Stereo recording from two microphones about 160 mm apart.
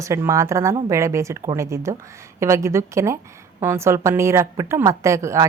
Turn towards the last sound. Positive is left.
turn(degrees=-20)  # may be behind; listen again after turning